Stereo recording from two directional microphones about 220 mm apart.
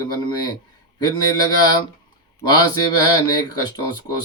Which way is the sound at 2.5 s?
20° left (ahead or behind).